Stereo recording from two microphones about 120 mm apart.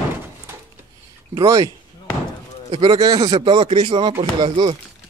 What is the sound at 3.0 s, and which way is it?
Speech, 30° right (ahead or behind).